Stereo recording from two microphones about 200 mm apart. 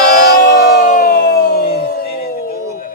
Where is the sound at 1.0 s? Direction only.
50° left (ahead or behind).